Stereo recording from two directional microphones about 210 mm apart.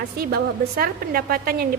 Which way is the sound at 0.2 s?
45° right (ahead or behind).